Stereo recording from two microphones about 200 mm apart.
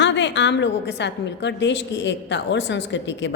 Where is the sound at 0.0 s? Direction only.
65° left (ahead or behind).